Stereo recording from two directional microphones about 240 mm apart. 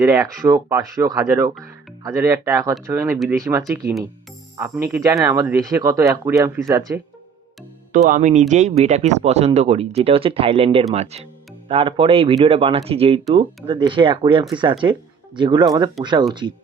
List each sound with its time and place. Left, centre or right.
0.0 s speech: centre
7.9 s speech: right